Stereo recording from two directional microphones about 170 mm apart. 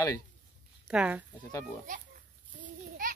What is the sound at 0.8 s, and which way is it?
Speech, 5° right (ahead or behind).